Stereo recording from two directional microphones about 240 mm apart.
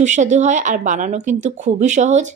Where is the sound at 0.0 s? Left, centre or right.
Right.